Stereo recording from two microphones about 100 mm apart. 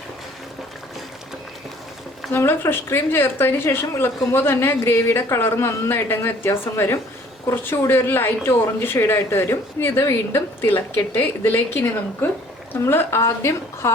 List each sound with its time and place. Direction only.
2.3 s speech: 20° left (ahead or behind)